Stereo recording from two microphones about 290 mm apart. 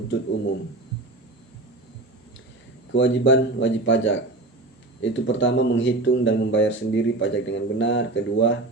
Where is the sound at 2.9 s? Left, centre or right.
Left.